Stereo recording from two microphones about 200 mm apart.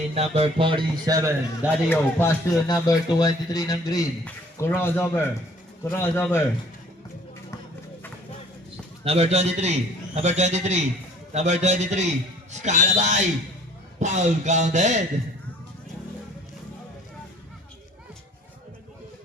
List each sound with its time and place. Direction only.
0.1 s a man's voice: 30° right (ahead or behind); by 1.7 s 15° right (ahead or behind)
1.9 s speech: 10° left (ahead or behind)
9.0 s speech: 30° right (ahead or behind)